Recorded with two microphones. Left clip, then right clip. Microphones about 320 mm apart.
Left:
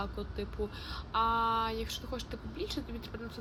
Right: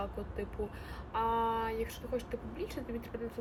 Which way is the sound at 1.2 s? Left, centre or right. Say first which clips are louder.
Left 2 dB; centre.